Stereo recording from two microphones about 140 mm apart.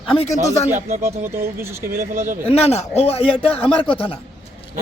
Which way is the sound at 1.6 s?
15° right (ahead or behind).